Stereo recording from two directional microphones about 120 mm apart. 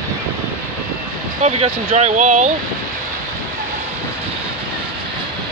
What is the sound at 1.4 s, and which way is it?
Speech, 65° right (ahead or behind).